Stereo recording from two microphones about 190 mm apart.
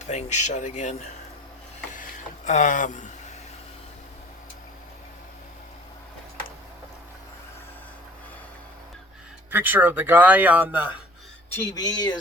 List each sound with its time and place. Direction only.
0.0 s speech: 40° left (ahead or behind)
2.0 s a sound: 40° left (ahead or behind)
9.5 s speech: 10° right (ahead or behind)
11.5 s speech: 15° left (ahead or behind)